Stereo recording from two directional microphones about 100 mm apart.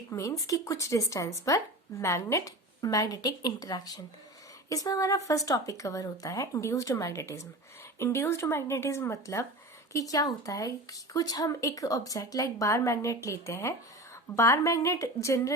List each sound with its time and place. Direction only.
0.1 s speech: 30° left (ahead or behind)